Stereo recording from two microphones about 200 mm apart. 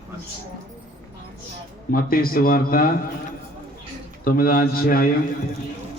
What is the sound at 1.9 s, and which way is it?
A man's voice, 45° left (ahead or behind).